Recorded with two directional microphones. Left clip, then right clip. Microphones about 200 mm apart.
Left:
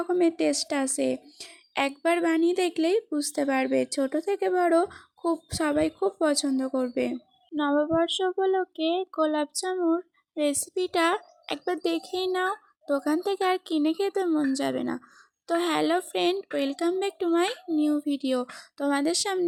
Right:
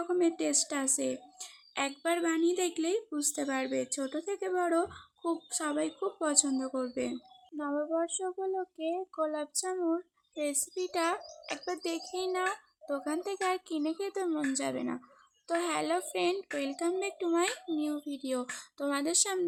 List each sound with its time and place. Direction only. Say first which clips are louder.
0.0 s speech: left 6 dB; 30° left (ahead or behind)